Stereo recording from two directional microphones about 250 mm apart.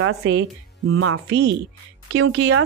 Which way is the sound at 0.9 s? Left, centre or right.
Right.